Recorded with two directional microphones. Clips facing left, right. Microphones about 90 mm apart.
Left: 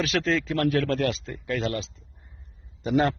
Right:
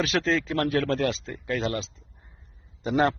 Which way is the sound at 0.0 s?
25° right (ahead or behind).